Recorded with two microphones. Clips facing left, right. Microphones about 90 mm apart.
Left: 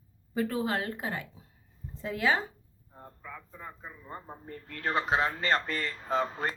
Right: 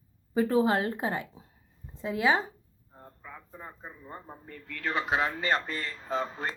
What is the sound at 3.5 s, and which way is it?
Speech, 35° right (ahead or behind).